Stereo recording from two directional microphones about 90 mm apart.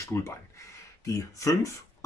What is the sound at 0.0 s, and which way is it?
Speech, 30° left (ahead or behind).